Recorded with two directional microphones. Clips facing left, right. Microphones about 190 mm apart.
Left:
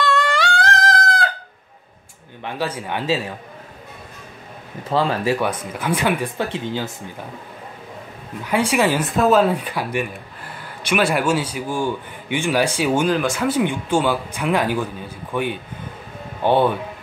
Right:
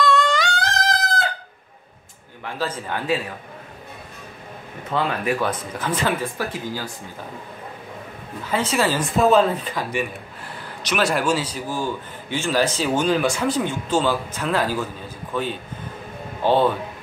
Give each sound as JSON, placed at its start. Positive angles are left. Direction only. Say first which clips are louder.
{"t": 0.0, "sound": "music", "louder": "even", "side_deg": 5}
{"t": 2.4, "sound": "speech", "louder": "left 2 dB", "side_deg": 20}
{"t": 4.9, "sound": "speech", "louder": "left 3 dB", "side_deg": 30}
{"t": 5.4, "sound": "speech", "louder": "left 1 dB", "side_deg": 10}
{"t": 6.3, "sound": "speech", "louder": "left 3 dB", "side_deg": 25}
{"t": 8.5, "sound": "speech", "louder": "left 3 dB", "side_deg": 10}
{"t": 9.1, "sound": "speech", "louder": "right 1 dB", "side_deg": 0}
{"t": 13.1, "sound": "speech", "louder": "left 1 dB", "side_deg": 0}